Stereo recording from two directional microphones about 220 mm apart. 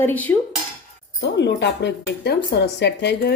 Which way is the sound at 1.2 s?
50° left (ahead or behind).